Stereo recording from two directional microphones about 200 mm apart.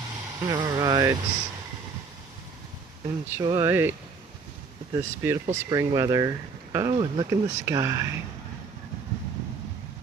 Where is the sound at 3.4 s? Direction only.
20° right (ahead or behind).